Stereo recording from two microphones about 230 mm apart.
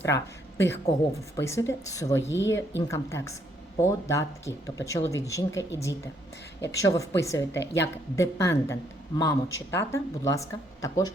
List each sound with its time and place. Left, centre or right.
0.0 s a woman's voice: centre
2.3 s speech: left
2.6 s speech: centre
7.6 s speech: left
8.1 s speech: centre